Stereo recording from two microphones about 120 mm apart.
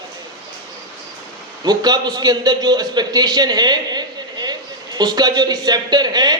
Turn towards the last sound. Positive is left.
turn(degrees=-35)  # may be behind; listen again after turning